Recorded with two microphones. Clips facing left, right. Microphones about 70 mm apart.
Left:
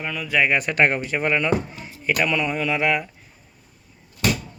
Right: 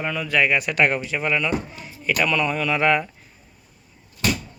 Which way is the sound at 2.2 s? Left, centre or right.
Centre.